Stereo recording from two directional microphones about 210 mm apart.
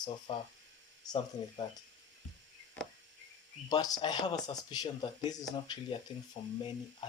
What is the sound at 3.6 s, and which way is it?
Speech, 20° left (ahead or behind).